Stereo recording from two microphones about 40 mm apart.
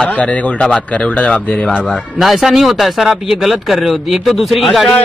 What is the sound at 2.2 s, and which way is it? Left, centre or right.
Speech, centre.